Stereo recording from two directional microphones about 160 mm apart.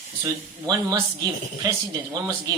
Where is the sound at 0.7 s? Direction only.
25° right (ahead or behind).